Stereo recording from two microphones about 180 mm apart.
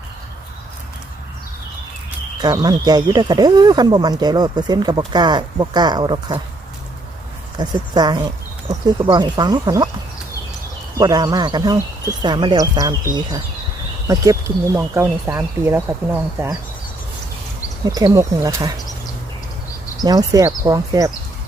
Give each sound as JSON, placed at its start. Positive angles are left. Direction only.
{"t": 2.4, "sound": "speech", "side_deg": -20}
{"t": 7.6, "sound": "speech", "side_deg": -20}
{"t": 10.9, "sound": "speech", "side_deg": -20}
{"t": 14.1, "sound": "speech", "side_deg": -20}
{"t": 17.8, "sound": "speech", "side_deg": -20}
{"t": 20.1, "sound": "speech", "side_deg": -20}